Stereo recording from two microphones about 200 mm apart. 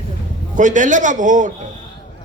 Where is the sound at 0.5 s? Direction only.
40° right (ahead or behind).